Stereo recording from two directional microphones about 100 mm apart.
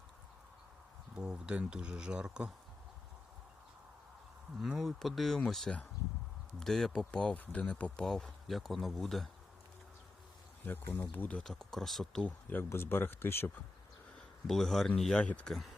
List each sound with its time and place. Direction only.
1.1 s speech: 10° right (ahead or behind)
4.6 s speech: centre (ahead or behind)
10.7 s speech: 20° left (ahead or behind); by 12.3 s 5° left (ahead or behind)
12.5 s speech: 20° left (ahead or behind)
14.4 s speech: centre (ahead or behind)